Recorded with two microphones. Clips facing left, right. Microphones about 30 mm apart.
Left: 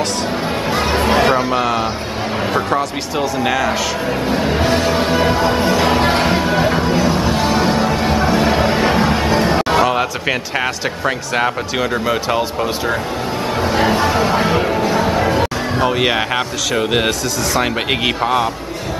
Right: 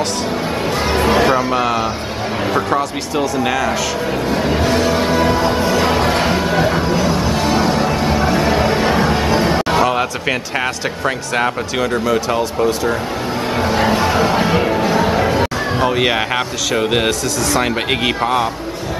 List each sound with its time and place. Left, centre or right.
0.7 s music: centre
2.5 s speech: centre
4.3 s music: centre
12.0 s music: centre
13.6 s speech: centre